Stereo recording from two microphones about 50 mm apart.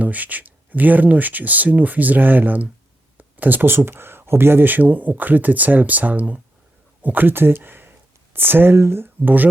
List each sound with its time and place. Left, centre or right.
0.0 s speech: right